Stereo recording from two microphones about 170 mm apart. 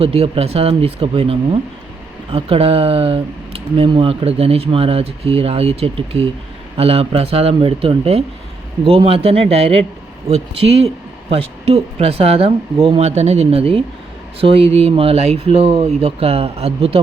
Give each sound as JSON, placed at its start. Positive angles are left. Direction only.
{"t": 0.0, "sound": "speech", "side_deg": -35}